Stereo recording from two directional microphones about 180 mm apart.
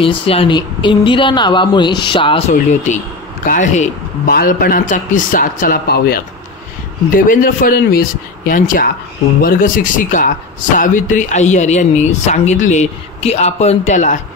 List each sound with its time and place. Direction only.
0.0 s speech: 30° left (ahead or behind)
2.7 s a man's voice: 40° left (ahead or behind)
4.3 s a man's voice: 55° left (ahead or behind)